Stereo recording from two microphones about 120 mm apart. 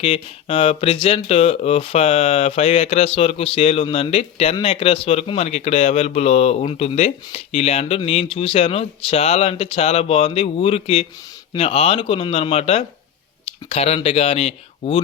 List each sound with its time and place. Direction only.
0.0 s speech: 50° left (ahead or behind)